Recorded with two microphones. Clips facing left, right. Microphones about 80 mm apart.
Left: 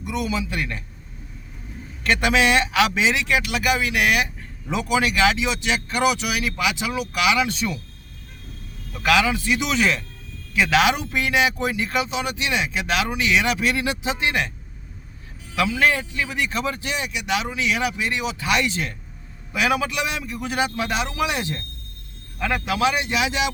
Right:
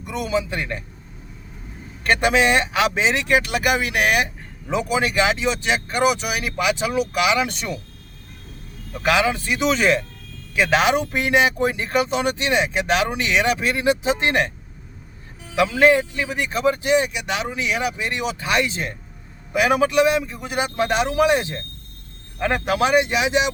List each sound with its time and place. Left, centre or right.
0.0 s a man's voice: right
0.5 s a man's voice: right
2.0 s speech: right
4.7 s speech: right
8.9 s speech: right
15.5 s speech: right
19.5 s speech: right